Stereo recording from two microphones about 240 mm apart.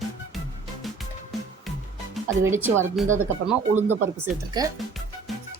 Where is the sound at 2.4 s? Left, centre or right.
Centre.